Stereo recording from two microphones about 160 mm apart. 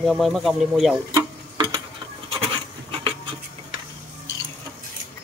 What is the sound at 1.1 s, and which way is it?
Tick-tock, 30° right (ahead or behind).